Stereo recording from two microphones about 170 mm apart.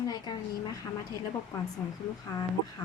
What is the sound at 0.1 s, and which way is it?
Speech, 25° left (ahead or behind).